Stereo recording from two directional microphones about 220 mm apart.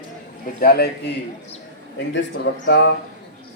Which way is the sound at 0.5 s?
45° left (ahead or behind).